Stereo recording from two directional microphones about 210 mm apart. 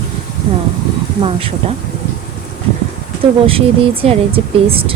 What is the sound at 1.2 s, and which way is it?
Speech, 25° right (ahead or behind).